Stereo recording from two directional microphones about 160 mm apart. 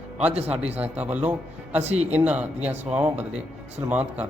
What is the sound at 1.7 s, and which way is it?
Speech, 45° right (ahead or behind).